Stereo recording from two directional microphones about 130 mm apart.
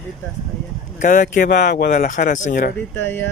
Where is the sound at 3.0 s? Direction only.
15° left (ahead or behind).